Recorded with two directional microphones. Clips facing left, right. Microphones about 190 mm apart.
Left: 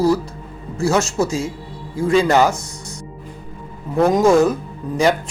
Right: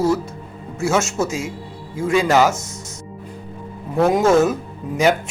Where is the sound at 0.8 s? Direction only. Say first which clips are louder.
Left 2 dB; centre (ahead or behind).